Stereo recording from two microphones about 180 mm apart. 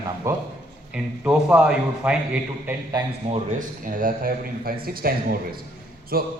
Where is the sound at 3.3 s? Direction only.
45° right (ahead or behind).